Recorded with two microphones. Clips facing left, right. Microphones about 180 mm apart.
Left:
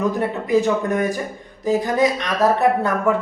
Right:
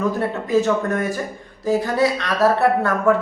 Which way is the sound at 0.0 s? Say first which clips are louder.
Left 1 dB; 15° left (ahead or behind).